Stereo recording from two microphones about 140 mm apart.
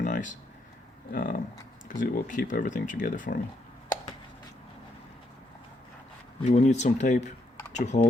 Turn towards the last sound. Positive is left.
turn(degrees=55)  # may be behind; listen again after turning